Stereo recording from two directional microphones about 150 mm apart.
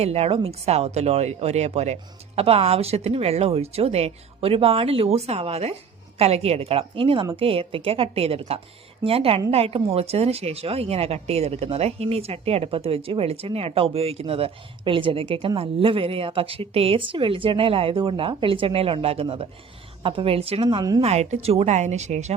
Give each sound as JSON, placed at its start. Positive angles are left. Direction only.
{"t": 0.0, "sound": "speech", "side_deg": -45}
{"t": 20.7, "sound": "speech", "side_deg": -25}
{"t": 21.0, "sound": "speech", "side_deg": -45}